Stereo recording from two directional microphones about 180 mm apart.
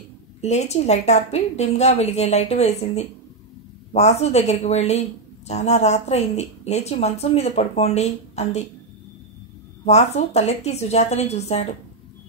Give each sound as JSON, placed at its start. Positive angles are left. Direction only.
{"t": 0.4, "sound": "speech", "side_deg": 35}
{"t": 9.8, "sound": "speech", "side_deg": 40}